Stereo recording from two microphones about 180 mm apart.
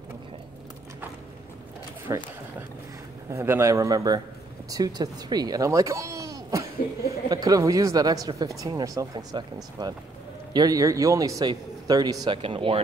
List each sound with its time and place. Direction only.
2.1 s a man's voice: 20° right (ahead or behind)
3.3 s a man's voice: 15° right (ahead or behind)